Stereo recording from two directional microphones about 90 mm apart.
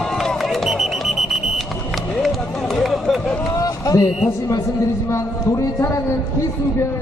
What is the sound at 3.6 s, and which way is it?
Run, 40° left (ahead or behind).